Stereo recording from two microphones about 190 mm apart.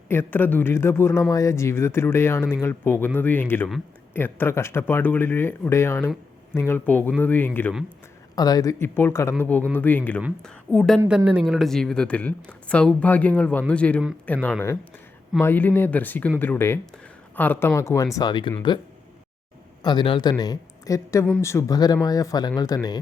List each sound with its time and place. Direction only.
0.1 s a woman's voice: 10° left (ahead or behind)
8.4 s a woman's voice: 20° left (ahead or behind)
19.8 s speech: 25° left (ahead or behind)